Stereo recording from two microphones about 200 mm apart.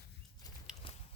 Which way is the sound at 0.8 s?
25° left (ahead or behind).